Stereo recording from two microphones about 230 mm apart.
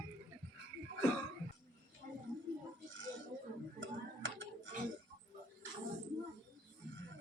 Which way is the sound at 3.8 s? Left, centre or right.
Right.